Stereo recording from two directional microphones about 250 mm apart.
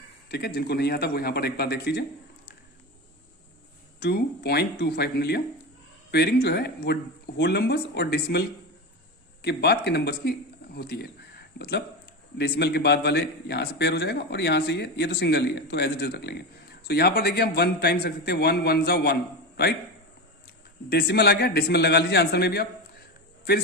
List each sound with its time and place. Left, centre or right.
0.3 s a man's voice: left
4.0 s a man's voice: left
20.9 s a man's voice: left